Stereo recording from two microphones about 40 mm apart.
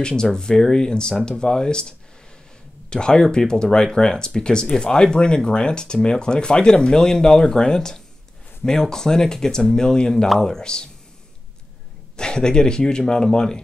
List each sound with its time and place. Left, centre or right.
0.0 s speech: centre
12.2 s speech: centre